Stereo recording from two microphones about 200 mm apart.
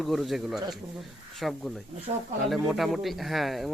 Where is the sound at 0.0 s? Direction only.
Centre (ahead or behind).